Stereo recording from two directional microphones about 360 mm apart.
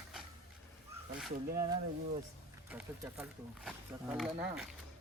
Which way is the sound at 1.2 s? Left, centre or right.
Centre.